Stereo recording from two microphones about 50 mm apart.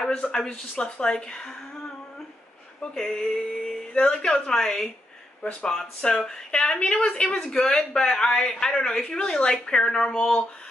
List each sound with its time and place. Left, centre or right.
0.5 s speech: centre
2.8 s speech: centre